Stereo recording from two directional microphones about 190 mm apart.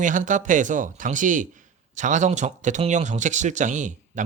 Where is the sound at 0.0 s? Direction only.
45° right (ahead or behind).